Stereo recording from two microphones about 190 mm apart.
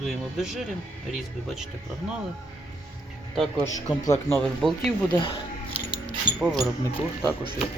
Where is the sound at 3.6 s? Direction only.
20° left (ahead or behind).